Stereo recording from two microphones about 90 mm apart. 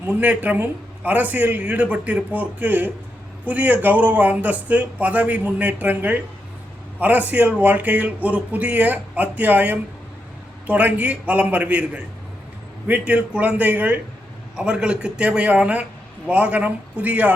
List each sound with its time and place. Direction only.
0.1 s a man's voice: 15° right (ahead or behind)